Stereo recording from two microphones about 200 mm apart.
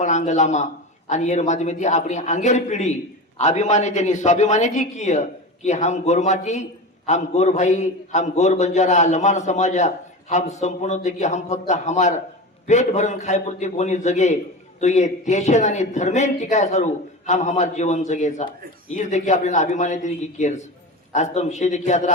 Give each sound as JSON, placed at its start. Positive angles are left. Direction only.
{"t": 0.0, "sound": "speech", "side_deg": 35}